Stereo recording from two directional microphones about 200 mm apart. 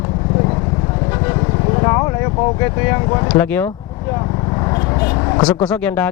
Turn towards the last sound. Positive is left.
turn(degrees=10)  # may be behind; listen again after turning